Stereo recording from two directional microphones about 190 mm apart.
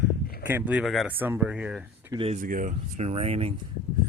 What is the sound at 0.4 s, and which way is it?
Speech, 10° right (ahead or behind).